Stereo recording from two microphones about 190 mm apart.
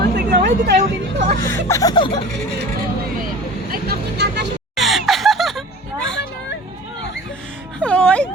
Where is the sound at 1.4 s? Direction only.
15° left (ahead or behind).